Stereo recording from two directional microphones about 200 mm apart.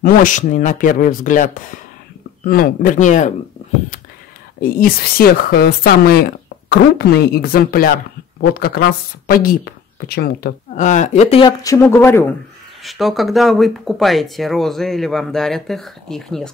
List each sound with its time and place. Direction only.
0.0 s speech: 40° left (ahead or behind)
4.6 s speech: 45° left (ahead or behind); by 11.5 s 30° left (ahead or behind)
11.6 s speech: 15° left (ahead or behind)
12.8 s speech: centre (ahead or behind)